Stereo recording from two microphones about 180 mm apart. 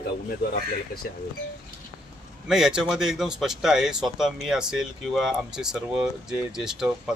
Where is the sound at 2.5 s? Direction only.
5° right (ahead or behind).